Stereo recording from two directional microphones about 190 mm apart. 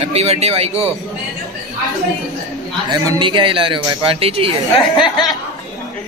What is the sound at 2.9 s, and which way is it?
A man's voice, 20° right (ahead or behind).